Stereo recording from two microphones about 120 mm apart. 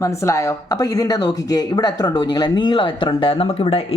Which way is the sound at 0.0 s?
25° left (ahead or behind).